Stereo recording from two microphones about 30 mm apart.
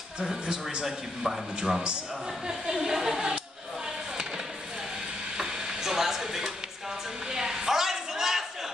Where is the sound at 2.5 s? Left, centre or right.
Centre.